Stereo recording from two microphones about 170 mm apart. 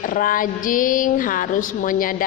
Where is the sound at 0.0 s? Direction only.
55° left (ahead or behind).